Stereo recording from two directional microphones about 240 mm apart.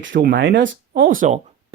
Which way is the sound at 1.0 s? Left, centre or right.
Right.